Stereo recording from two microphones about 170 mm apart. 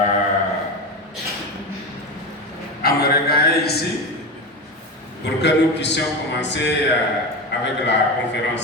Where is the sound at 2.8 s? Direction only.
65° left (ahead or behind).